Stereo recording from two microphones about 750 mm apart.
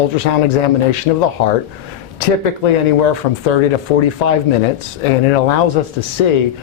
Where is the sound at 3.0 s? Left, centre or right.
Left.